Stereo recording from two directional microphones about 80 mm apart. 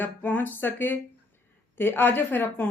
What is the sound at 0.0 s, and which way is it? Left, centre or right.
Speech, left.